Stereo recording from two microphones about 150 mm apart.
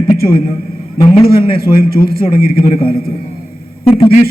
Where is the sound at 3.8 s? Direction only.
40° left (ahead or behind).